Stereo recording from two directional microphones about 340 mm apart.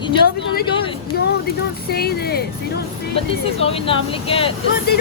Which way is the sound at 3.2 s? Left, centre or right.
Centre.